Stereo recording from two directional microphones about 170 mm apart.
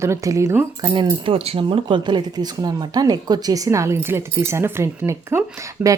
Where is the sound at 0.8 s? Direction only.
25° right (ahead or behind).